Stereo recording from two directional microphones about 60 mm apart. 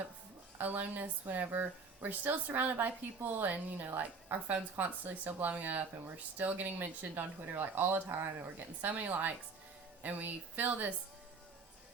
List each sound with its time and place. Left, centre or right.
0.6 s a woman's voice: right